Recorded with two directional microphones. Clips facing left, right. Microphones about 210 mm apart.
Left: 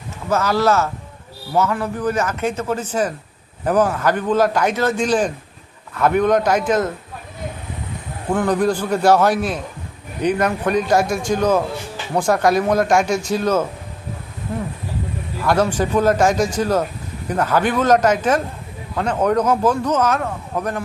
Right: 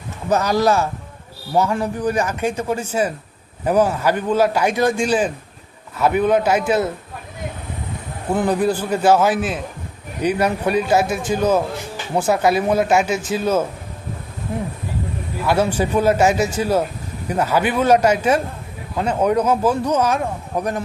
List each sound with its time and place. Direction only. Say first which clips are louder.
0.3 s a man's voice: right 1 dB; 15° right (ahead or behind)
8.4 s a man's voice: left 1 dB; 5° right (ahead or behind)
15.4 s a man's voice: left 1 dB; 10° right (ahead or behind)